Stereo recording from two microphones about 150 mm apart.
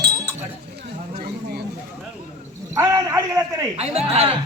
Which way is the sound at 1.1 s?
90° right.